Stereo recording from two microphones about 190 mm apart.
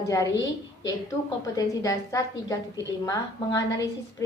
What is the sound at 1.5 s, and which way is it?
A woman's voice, 20° left (ahead or behind).